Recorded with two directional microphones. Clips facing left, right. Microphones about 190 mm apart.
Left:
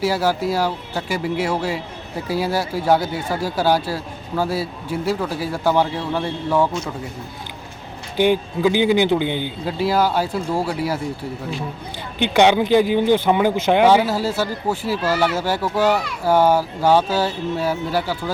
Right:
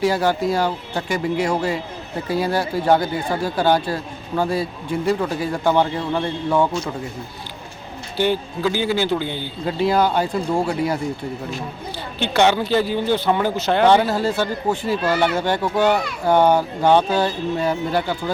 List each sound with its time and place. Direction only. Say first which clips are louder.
0.0 s speech: right 1 dB; 5° left (ahead or behind)
8.1 s speech: left 3 dB; 15° left (ahead or behind)
9.6 s speech: right 1 dB; 5° left (ahead or behind)